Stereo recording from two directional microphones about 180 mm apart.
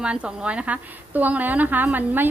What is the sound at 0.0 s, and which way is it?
A woman's voice, 5° right (ahead or behind).